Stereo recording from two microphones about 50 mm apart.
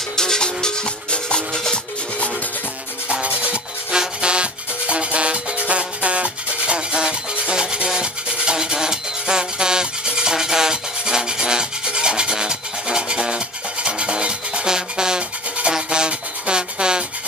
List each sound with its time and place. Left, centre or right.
0.1 s music: centre
3.1 s music: right